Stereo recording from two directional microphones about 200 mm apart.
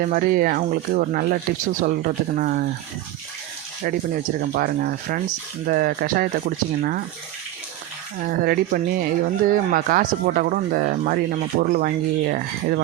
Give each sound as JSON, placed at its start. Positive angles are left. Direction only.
{"t": 0.0, "sound": "speech", "side_deg": -45}
{"t": 3.8, "sound": "speech", "side_deg": -45}
{"t": 8.2, "sound": "speech", "side_deg": -50}